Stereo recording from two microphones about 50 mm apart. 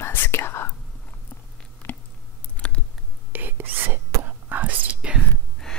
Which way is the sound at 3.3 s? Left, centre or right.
Right.